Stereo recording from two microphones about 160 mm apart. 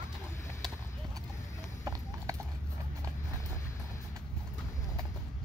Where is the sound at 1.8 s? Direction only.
20° right (ahead or behind).